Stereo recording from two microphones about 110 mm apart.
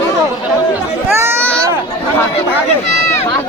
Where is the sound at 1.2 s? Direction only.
20° right (ahead or behind).